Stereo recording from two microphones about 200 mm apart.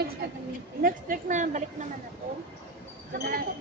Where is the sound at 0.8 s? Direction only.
45° right (ahead or behind).